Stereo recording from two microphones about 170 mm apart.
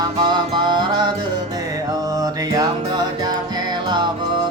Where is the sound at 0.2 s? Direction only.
25° right (ahead or behind).